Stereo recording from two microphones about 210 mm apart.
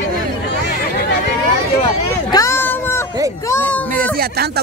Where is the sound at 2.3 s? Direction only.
15° left (ahead or behind).